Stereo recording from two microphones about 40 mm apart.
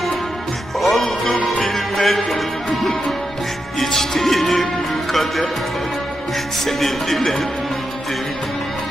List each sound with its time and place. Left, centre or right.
0.8 s music: centre
3.8 s music: centre
5.1 s speech: centre
6.7 s speech: centre